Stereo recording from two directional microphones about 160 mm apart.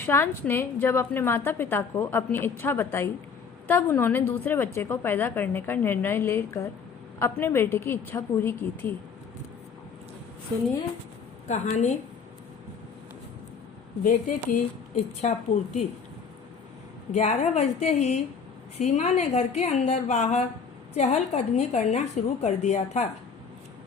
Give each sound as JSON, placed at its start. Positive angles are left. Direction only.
{"t": 0.0, "sound": "a woman's voice", "side_deg": 15}
{"t": 11.4, "sound": "a woman's voice", "side_deg": 45}
{"t": 14.0, "sound": "a woman's voice", "side_deg": 55}
{"t": 17.2, "sound": "a woman's voice", "side_deg": 45}